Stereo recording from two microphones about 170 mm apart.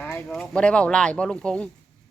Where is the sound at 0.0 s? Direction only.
5° left (ahead or behind).